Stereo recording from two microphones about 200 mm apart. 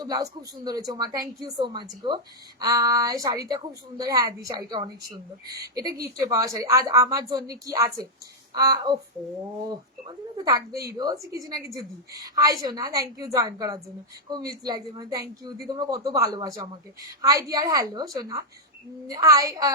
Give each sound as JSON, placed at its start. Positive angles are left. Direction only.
{"t": 0.0, "sound": "a woman's voice", "side_deg": -20}